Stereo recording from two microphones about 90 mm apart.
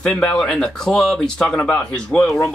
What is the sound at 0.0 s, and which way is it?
Speech, 15° left (ahead or behind).